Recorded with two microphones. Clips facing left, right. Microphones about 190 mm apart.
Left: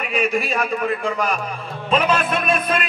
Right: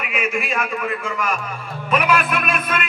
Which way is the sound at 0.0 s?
35° left (ahead or behind).